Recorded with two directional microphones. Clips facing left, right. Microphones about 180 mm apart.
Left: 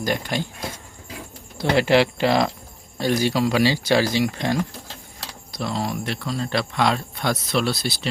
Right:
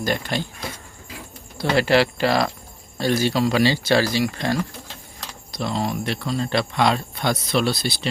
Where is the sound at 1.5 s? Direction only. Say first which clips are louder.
Left 1 dB; 20° left (ahead or behind).